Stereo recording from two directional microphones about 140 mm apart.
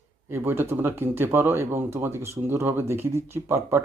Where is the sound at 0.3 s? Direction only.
15° right (ahead or behind).